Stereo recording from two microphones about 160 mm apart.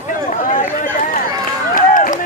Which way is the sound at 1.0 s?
55° left (ahead or behind).